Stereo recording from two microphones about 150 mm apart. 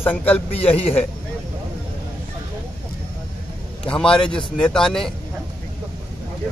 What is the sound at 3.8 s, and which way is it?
A man's voice, 5° left (ahead or behind).